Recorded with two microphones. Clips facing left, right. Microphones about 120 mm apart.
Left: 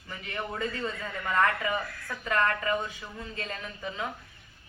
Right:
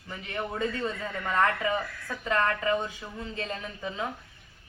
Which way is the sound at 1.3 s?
25° right (ahead or behind).